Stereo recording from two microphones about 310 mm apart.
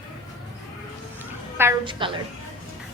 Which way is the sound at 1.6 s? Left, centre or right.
Centre.